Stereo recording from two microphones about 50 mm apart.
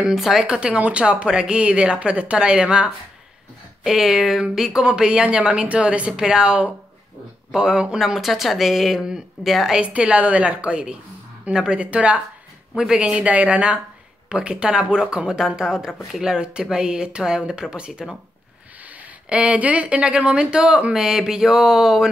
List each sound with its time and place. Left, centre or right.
0.0 s speech: centre
3.8 s speech: centre
8.0 s speech: centre
9.8 s speech: right